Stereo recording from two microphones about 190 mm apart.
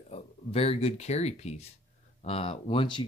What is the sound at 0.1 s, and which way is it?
Speech, 30° left (ahead or behind).